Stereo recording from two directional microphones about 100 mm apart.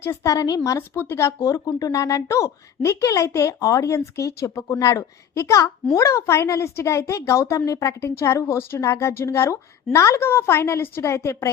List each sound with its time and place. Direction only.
0.0 s speech: 30° left (ahead or behind)